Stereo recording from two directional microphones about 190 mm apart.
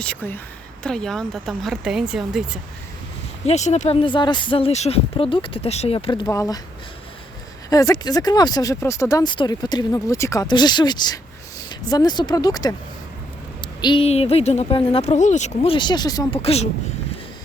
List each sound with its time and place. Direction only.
0.0 s speech: 10° left (ahead or behind)
3.4 s speech: 35° left (ahead or behind); by 6.6 s 15° left (ahead or behind)
7.7 s speech: 20° left (ahead or behind)
13.8 s speech: 30° left (ahead or behind)
16.4 s speech: 30° left (ahead or behind)